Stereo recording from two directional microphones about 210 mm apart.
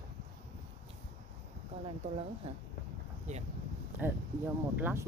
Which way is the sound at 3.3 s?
35° right (ahead or behind).